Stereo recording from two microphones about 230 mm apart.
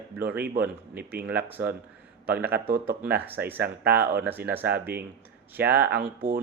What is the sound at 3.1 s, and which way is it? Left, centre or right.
Speech, centre.